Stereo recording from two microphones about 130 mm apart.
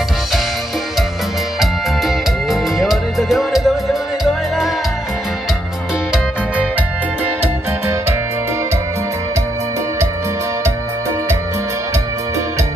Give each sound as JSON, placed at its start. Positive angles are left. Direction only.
{"t": 1.6, "sound": "music", "side_deg": 0}